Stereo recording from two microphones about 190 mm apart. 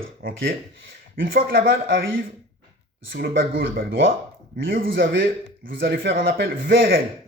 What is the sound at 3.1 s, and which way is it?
Speech, 50° right (ahead or behind).